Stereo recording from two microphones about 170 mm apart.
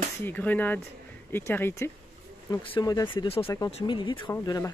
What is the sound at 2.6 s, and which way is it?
Speech, 25° left (ahead or behind).